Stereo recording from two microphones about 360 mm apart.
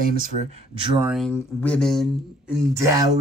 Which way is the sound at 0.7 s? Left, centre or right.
Centre.